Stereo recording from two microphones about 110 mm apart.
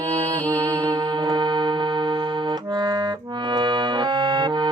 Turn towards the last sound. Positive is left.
turn(degrees=-45)  # may be behind; listen again after turning